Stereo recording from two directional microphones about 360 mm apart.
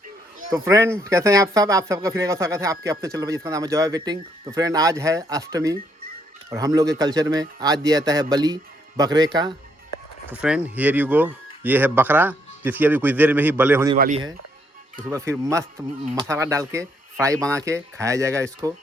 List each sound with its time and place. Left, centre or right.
0.5 s speech: centre
13.9 s speech: centre